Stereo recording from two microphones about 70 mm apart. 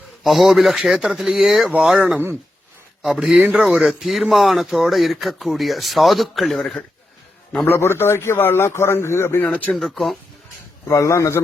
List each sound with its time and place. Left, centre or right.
0.2 s speech: centre
2.0 s speech: right
3.0 s a man's voice: centre
7.7 s a man's voice: left
9.5 s speech: left
9.7 s speech: centre
10.8 s speech: left